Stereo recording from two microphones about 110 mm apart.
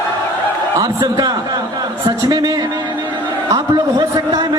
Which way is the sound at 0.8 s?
35° right (ahead or behind).